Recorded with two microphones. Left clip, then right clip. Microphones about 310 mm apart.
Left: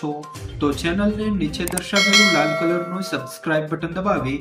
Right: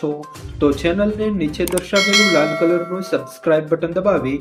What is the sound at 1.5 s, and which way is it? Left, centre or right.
Speech, centre.